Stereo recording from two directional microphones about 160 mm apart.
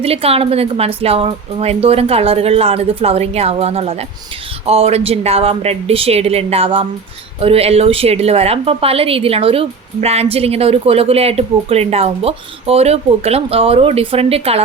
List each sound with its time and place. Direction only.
0.0 s a woman's voice: 35° right (ahead or behind)